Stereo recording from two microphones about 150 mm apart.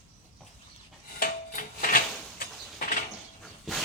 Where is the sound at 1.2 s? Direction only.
65° left (ahead or behind).